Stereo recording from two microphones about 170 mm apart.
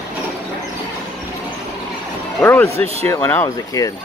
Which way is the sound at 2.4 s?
10° left (ahead or behind).